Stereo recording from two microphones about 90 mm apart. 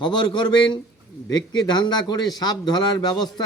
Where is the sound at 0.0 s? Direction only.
60° left (ahead or behind).